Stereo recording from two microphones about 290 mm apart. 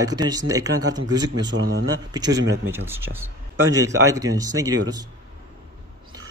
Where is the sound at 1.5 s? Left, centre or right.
Right.